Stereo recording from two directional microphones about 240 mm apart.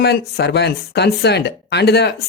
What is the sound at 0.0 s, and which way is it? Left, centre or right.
Speech, left.